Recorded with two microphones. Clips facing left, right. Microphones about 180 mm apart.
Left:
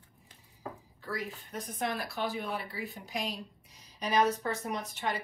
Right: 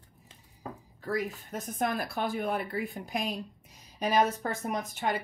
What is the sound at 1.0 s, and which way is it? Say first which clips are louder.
A woman's voice: right 6 dB; 45° right (ahead or behind).